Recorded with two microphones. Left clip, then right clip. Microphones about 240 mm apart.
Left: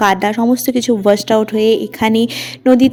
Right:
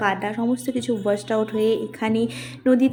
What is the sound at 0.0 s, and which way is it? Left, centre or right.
Speech, left.